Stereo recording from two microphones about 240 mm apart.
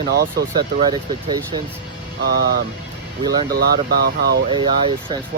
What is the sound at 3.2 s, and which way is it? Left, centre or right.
Speech, centre.